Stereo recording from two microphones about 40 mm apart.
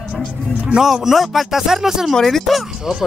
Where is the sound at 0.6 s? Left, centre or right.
Centre.